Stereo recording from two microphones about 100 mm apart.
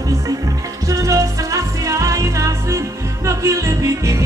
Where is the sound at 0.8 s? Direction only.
35° right (ahead or behind).